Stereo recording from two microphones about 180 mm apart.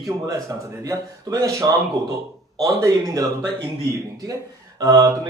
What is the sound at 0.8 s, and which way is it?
Speech, 20° right (ahead or behind).